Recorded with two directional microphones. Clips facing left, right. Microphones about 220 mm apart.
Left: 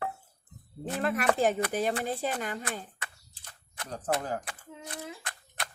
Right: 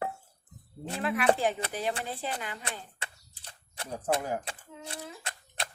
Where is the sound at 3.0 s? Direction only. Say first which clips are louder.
Right 1 dB; 30° right (ahead or behind).